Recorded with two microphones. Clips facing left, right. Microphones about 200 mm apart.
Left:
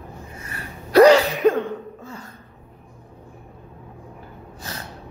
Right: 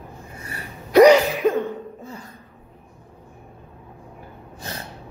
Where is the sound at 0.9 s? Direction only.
15° right (ahead or behind).